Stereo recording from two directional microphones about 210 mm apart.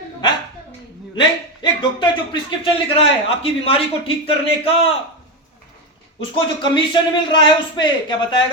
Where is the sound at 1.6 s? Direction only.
20° left (ahead or behind).